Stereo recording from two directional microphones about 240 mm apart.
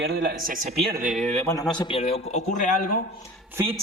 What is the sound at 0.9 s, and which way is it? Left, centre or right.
A man's voice, centre.